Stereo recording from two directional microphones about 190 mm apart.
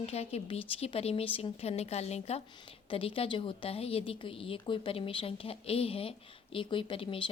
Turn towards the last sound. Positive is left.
turn(degrees=25)  # may be behind; listen again after turning